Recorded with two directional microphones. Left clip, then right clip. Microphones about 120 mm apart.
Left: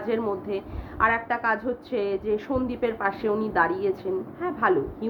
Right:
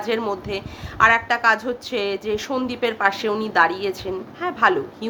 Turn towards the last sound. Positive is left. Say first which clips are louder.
# right 5 dB
turn(degrees=-25)  # may be behind; listen again after turning